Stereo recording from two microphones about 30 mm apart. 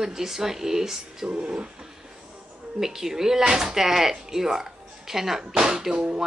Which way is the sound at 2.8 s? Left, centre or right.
Centre.